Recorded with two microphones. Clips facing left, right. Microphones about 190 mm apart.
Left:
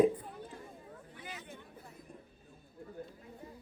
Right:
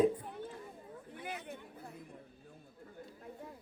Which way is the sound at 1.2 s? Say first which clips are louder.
Right 5 dB; 60° right (ahead or behind).